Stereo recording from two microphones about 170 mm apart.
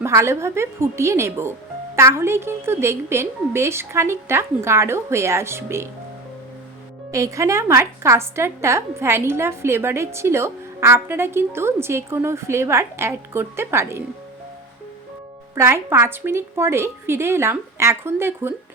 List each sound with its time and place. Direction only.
0.0 s a woman's voice: 15° right (ahead or behind)
7.1 s a woman's voice: 20° right (ahead or behind)
15.5 s a woman's voice: 15° right (ahead or behind)